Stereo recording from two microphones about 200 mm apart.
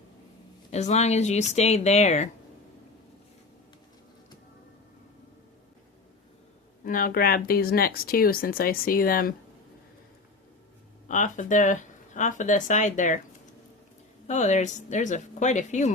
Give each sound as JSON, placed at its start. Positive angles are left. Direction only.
{"t": 0.7, "sound": "speech", "side_deg": 35}
{"t": 6.8, "sound": "speech", "side_deg": 45}
{"t": 11.1, "sound": "speech", "side_deg": 40}
{"t": 14.3, "sound": "speech", "side_deg": 35}